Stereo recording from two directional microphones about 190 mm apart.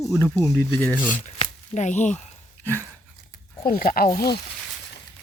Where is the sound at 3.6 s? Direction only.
50° left (ahead or behind).